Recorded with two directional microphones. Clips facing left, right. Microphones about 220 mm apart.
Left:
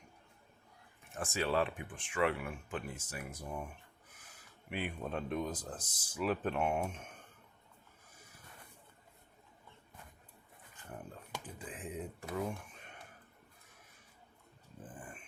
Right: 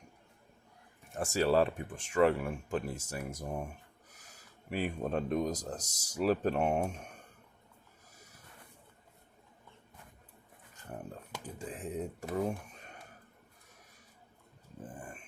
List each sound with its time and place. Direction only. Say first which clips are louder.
1.1 s speech: right 6 dB; 40° right (ahead or behind)
11.4 s a sound: right 7 dB; 45° right (ahead or behind)
14.8 s dog: right 3 dB; 40° right (ahead or behind)